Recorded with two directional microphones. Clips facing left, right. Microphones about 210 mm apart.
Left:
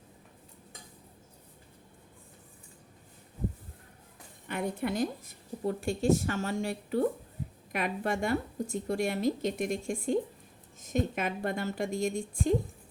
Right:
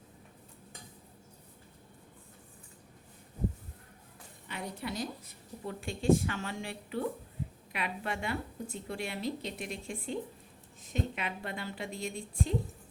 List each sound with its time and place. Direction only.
4.4 s a woman's voice: 50° left (ahead or behind)
5.6 s a woman's voice: 40° left (ahead or behind)